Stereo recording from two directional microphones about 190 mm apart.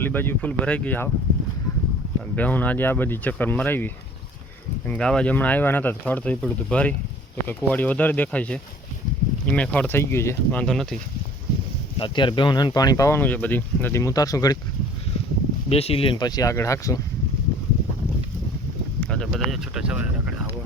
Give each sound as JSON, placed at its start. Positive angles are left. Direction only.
{"t": 0.0, "sound": "speech", "side_deg": 10}
{"t": 2.3, "sound": "speech", "side_deg": 10}
{"t": 11.9, "sound": "speech", "side_deg": 25}
{"t": 15.7, "sound": "speech", "side_deg": 30}
{"t": 18.9, "sound": "speech", "side_deg": 5}